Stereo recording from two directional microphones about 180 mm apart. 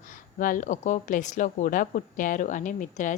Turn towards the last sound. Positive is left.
turn(degrees=45)  # may be behind; listen again after turning